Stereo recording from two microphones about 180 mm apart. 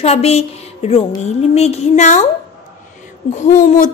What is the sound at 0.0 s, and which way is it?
A woman's voice, 35° left (ahead or behind).